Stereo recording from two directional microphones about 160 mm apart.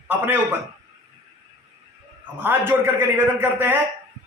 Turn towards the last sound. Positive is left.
turn(degrees=-10)  # may be behind; listen again after turning